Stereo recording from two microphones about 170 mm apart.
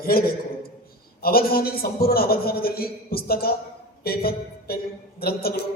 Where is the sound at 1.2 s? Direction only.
60° left (ahead or behind).